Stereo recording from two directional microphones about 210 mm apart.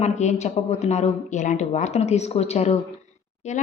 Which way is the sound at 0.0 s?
35° left (ahead or behind).